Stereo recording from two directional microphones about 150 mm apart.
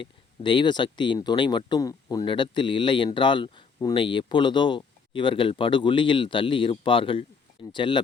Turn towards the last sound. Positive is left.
turn(degrees=30)  # may be behind; listen again after turning